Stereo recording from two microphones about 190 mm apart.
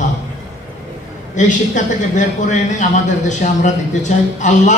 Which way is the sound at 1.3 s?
40° left (ahead or behind).